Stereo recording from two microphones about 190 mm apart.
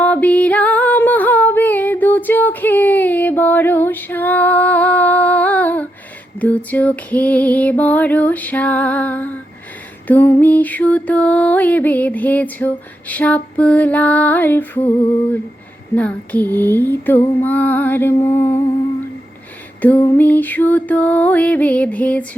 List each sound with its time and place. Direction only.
0.0 s music: 5° left (ahead or behind)
16.0 s music: 10° left (ahead or behind)
19.8 s music: 10° left (ahead or behind)